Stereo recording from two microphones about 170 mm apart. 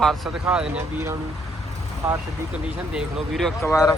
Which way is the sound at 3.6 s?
20° left (ahead or behind).